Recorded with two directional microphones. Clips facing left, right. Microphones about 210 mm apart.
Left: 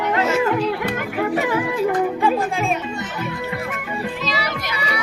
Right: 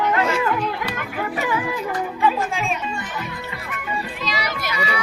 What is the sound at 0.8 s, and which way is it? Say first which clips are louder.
Music: left 5 dB; 55° left (ahead or behind).